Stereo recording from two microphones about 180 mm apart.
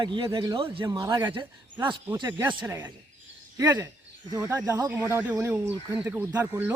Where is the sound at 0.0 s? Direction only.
25° right (ahead or behind).